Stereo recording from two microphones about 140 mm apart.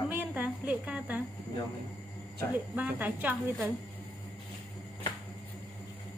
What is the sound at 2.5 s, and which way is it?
Speech, 10° right (ahead or behind).